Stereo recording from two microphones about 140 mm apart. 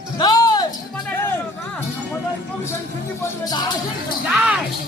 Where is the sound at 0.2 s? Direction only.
30° left (ahead or behind).